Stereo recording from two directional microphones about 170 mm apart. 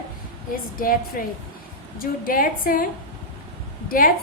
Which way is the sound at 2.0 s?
55° left (ahead or behind).